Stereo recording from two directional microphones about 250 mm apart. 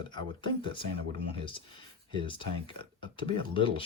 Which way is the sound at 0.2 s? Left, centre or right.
Centre.